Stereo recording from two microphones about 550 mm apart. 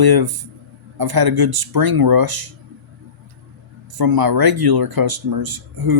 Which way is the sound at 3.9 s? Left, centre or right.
Right.